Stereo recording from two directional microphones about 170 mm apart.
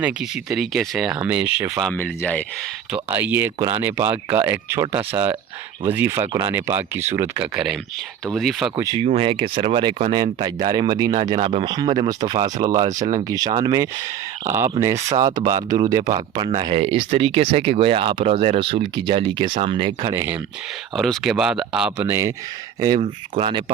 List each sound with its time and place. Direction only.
0.0 s speech: 5° right (ahead or behind)
1.8 s speech: 5° left (ahead or behind)
2.9 s speech: 10° right (ahead or behind)
9.0 s speech: 35° right (ahead or behind)
12.9 s speech: 45° right (ahead or behind)
13.2 s speech: 20° right (ahead or behind)
20.1 s speech: 10° right (ahead or behind)
20.9 s speech: centre (ahead or behind)
23.4 s speech: 30° right (ahead or behind)